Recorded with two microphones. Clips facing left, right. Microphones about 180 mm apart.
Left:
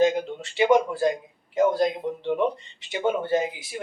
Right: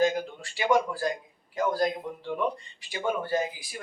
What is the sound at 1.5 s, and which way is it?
Speech, 20° left (ahead or behind).